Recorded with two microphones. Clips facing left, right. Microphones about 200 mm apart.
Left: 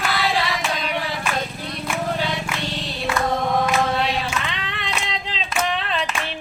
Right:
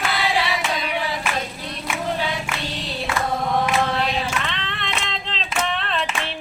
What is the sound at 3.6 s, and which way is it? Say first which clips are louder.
Female singing: left 1 dB; centre (ahead or behind).